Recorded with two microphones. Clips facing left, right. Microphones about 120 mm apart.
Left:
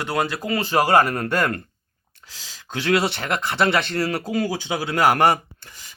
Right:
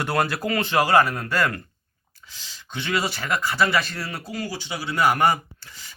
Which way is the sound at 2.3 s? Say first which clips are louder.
Left 5 dB; 90° left.